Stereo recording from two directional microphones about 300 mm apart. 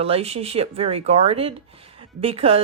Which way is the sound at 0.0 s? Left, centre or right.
Centre.